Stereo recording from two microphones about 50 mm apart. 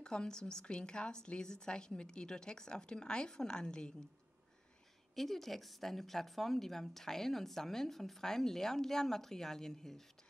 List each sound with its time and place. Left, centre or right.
0.0 s speech: centre
5.1 s speech: centre